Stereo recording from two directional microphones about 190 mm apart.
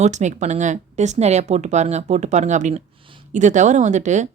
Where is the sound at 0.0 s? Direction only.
40° right (ahead or behind).